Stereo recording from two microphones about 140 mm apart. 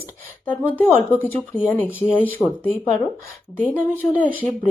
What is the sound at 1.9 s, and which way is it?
Speech, 10° right (ahead or behind).